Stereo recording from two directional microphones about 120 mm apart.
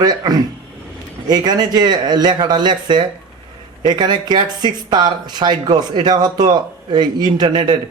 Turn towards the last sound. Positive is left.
turn(degrees=-40)  # may be behind; listen again after turning